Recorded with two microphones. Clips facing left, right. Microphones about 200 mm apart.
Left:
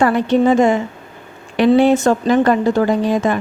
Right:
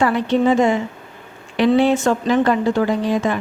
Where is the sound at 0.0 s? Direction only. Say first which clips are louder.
Left 3 dB; 45° left (ahead or behind).